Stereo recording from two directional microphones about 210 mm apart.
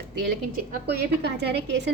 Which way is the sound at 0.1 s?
50° right (ahead or behind).